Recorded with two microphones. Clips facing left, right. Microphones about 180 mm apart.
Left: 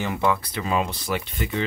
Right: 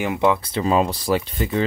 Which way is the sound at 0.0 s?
20° right (ahead or behind).